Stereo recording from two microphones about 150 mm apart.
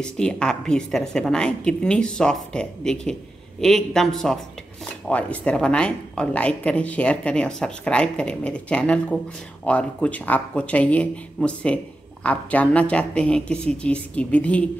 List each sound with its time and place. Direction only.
0.0 s a woman's voice: 5° left (ahead or behind)